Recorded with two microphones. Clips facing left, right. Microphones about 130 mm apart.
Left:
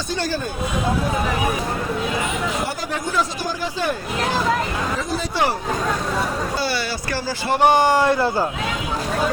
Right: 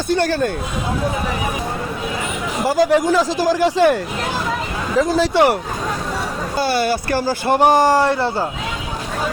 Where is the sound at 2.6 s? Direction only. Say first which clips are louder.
Right 12 dB; 90° right; by 3.9 s 75° right (ahead or behind).